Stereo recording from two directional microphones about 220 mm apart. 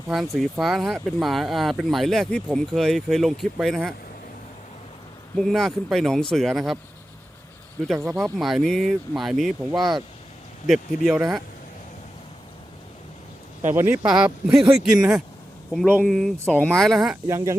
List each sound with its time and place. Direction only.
0.3 s speech: centre (ahead or behind)
5.4 s speech: centre (ahead or behind)
7.9 s speech: 10° right (ahead or behind)
8.4 s speech: centre (ahead or behind)
13.7 s speech: 10° right (ahead or behind)
17.2 s speech: 15° right (ahead or behind)